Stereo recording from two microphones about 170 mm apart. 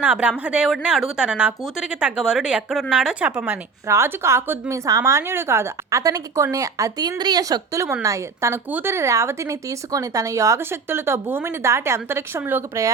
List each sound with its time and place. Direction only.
0.0 s speech: 10° right (ahead or behind)